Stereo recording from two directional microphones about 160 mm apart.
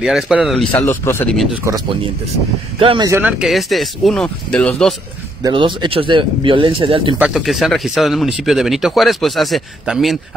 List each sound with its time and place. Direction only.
0.0 s speech: 5° right (ahead or behind); by 1.3 s 15° left (ahead or behind)
1.6 s speech: 25° right (ahead or behind)
2.8 s speech: 35° right (ahead or behind)
3.1 s speech: 10° right (ahead or behind); by 4.9 s 5° left (ahead or behind)
5.4 s speech: 30° right (ahead or behind)
7.2 s speech: 5° right (ahead or behind)